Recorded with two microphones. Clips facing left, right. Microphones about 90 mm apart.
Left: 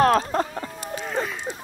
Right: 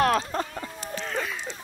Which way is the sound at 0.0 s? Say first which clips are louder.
Left 4 dB; 35° left (ahead or behind).